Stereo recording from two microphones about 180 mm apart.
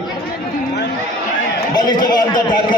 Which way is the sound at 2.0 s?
25° left (ahead or behind).